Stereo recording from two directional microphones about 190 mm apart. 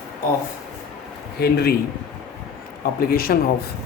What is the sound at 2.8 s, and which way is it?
Speech, 50° left (ahead or behind).